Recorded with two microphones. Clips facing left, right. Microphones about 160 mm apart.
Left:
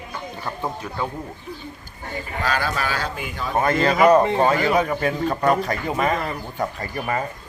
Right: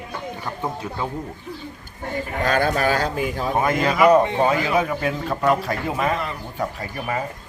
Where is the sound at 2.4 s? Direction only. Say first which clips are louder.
Right 4 dB; 50° right (ahead or behind).